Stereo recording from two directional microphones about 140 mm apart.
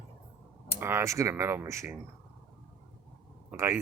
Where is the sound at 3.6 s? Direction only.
20° right (ahead or behind).